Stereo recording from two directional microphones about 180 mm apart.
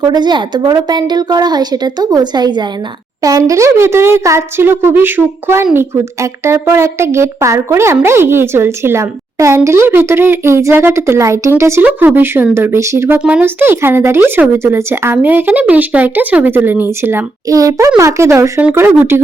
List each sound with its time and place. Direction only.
0.0 s a woman's voice: 25° right (ahead or behind)